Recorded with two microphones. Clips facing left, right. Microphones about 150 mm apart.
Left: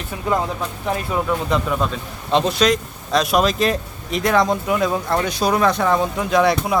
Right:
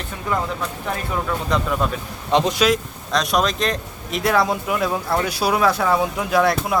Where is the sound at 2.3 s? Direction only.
15° right (ahead or behind).